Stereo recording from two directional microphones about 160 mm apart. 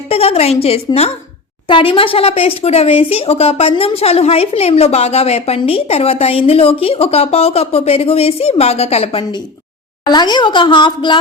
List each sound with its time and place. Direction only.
0.1 s a woman's voice: 40° left (ahead or behind)
10.0 s a woman's voice: 25° left (ahead or behind)